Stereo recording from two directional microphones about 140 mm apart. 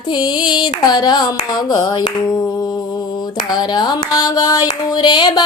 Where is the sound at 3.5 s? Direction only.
30° left (ahead or behind).